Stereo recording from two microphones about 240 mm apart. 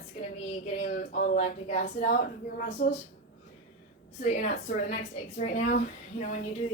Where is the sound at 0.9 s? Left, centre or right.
Left.